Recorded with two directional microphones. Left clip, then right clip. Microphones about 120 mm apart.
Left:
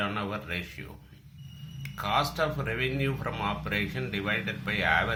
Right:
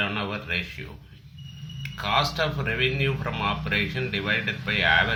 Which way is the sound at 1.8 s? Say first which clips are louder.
Right 4 dB; 40° left (ahead or behind).